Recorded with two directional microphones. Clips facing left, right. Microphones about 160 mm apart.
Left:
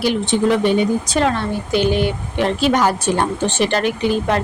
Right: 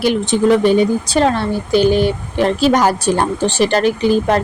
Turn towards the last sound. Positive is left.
turn(degrees=-40)  # may be behind; listen again after turning